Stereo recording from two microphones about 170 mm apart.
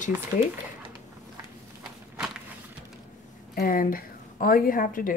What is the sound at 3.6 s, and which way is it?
A woman's voice, 55° left (ahead or behind).